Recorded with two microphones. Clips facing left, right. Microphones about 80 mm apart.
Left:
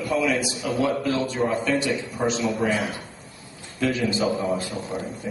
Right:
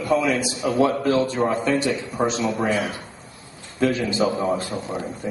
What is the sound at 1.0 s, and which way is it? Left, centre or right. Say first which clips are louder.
Speech: right 5 dB; right.